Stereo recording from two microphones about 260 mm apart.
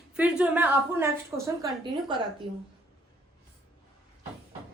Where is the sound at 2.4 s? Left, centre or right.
Centre.